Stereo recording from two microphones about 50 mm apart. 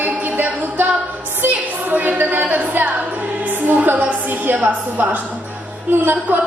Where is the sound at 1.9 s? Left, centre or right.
Right.